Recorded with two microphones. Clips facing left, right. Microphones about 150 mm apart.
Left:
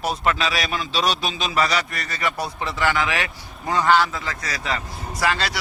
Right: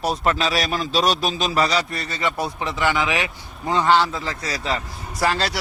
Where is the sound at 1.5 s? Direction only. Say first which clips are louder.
Even; 30° right (ahead or behind).